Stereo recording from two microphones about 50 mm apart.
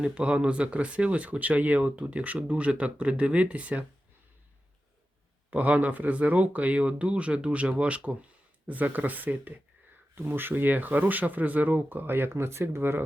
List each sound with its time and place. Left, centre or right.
0.0 s speech: right
5.5 s speech: right